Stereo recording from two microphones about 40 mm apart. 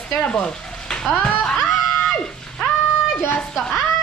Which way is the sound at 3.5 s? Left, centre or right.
Centre.